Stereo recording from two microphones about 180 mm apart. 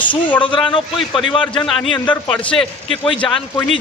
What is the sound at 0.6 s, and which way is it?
Speech, 25° left (ahead or behind).